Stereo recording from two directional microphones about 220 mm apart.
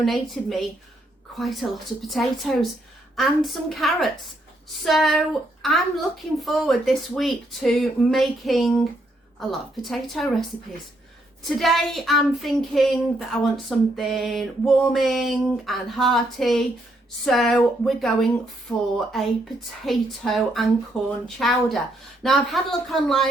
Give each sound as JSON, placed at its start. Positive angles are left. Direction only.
{"t": 0.0, "sound": "a woman's voice", "side_deg": 0}
{"t": 11.4, "sound": "a woman's voice", "side_deg": 0}